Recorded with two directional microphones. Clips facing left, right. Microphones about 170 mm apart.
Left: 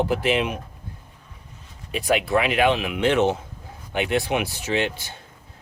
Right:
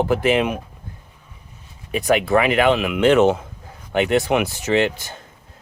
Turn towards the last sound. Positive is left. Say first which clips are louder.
# right 6 dB
turn(degrees=-80)